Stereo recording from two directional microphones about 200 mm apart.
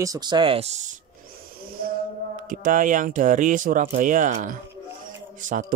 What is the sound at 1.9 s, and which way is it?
Speech, 45° right (ahead or behind).